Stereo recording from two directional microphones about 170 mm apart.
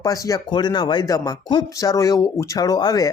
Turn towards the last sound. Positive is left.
turn(degrees=25)  # may be behind; listen again after turning